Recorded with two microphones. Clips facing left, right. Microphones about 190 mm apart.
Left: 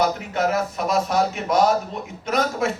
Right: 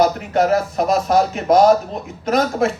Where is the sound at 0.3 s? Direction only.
35° right (ahead or behind).